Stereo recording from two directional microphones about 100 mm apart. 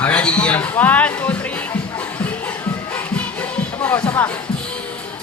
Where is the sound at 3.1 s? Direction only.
15° left (ahead or behind).